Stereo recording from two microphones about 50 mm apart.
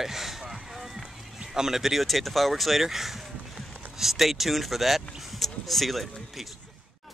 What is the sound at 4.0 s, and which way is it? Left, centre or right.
Speech, centre.